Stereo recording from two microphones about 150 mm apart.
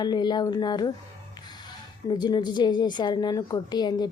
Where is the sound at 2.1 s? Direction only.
30° left (ahead or behind).